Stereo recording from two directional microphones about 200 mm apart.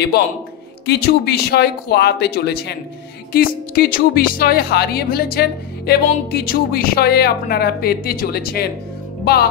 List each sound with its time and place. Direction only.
0.8 s a woman's voice: 55° left (ahead or behind)